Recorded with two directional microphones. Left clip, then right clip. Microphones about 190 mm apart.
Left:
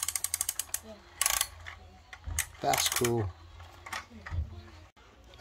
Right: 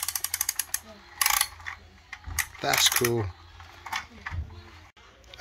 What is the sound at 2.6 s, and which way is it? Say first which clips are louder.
Speech: right 5 dB; 10° left (ahead or behind).